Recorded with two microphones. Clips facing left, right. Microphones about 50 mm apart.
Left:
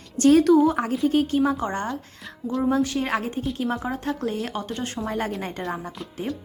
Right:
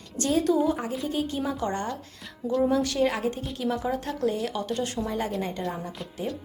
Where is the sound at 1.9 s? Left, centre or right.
Centre.